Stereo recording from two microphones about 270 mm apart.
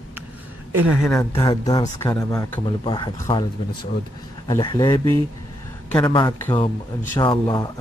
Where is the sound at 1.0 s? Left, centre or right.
Centre.